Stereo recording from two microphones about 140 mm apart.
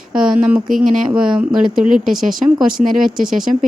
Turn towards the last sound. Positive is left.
turn(degrees=-5)  # may be behind; listen again after turning